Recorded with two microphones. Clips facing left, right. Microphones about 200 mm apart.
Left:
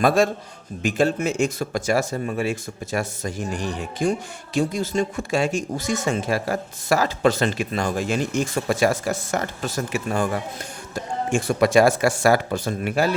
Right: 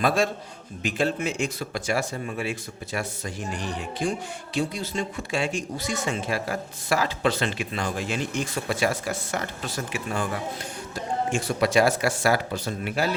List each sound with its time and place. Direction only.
0.0 s speech: 45° left (ahead or behind)
11.3 s speech: 50° left (ahead or behind)